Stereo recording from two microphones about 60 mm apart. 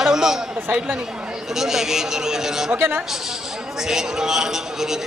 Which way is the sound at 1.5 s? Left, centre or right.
Centre.